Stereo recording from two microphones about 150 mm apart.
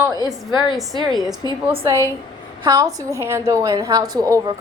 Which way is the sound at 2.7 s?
20° right (ahead or behind).